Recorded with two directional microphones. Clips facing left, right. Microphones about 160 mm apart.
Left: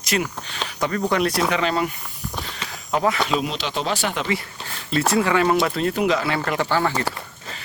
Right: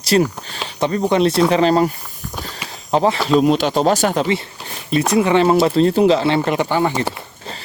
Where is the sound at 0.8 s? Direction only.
25° right (ahead or behind).